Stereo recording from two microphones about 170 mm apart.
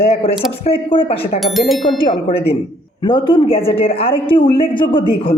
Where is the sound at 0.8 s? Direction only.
30° left (ahead or behind).